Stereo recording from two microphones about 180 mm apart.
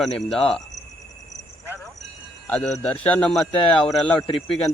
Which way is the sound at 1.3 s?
40° left (ahead or behind).